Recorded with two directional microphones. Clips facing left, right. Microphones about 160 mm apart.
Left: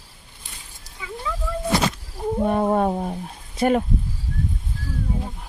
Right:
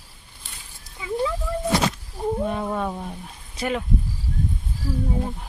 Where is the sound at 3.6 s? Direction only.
45° left (ahead or behind).